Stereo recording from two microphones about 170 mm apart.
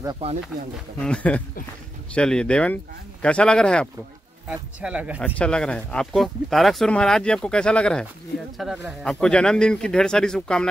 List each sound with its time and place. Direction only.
0.2 s speech: 35° right (ahead or behind)
0.9 s a man's voice: 5° left (ahead or behind)
4.5 s speech: 5° right (ahead or behind)
5.2 s speech: 5° left (ahead or behind)